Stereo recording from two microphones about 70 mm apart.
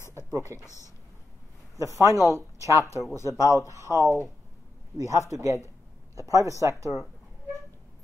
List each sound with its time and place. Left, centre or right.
0.3 s speech: right
1.8 s speech: right
2.8 s speech: left
5.3 s speech: right